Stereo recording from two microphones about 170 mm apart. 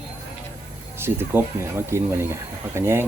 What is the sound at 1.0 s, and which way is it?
Speech, 15° right (ahead or behind).